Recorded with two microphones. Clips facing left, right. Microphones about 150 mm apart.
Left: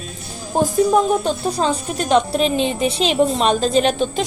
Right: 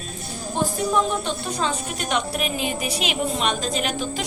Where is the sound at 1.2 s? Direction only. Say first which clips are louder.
Left 6 dB; 35° left (ahead or behind).